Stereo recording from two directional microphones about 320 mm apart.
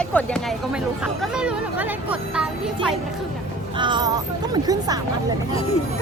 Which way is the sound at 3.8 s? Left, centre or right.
Centre.